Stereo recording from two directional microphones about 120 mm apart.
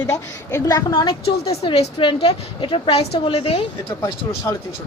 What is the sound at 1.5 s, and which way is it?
Speech, 60° left (ahead or behind).